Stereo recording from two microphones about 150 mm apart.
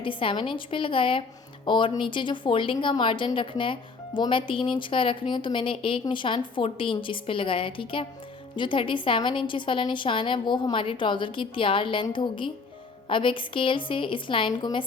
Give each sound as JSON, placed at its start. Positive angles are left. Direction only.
{"t": 0.0, "sound": "a woman's voice", "side_deg": 35}